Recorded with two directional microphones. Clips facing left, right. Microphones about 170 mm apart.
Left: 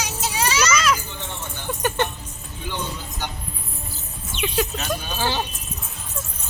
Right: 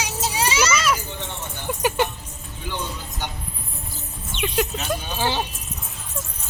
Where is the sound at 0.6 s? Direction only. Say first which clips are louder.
Left 1 dB; 5° right (ahead or behind).